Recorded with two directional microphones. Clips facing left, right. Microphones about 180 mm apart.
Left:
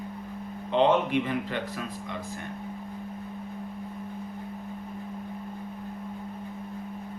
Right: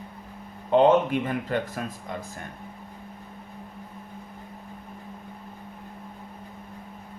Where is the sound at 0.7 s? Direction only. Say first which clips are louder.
Right 4 dB; 45° right (ahead or behind).